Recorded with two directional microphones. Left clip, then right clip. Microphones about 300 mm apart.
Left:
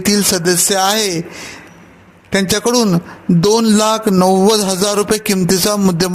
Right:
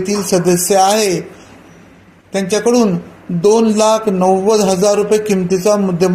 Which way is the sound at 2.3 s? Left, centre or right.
Left.